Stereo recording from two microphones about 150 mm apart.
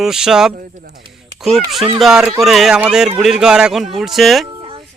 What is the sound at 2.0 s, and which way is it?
Speech, 5° right (ahead or behind).